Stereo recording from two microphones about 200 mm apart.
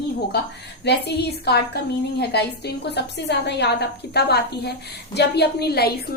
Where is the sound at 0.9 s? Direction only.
55° left (ahead or behind).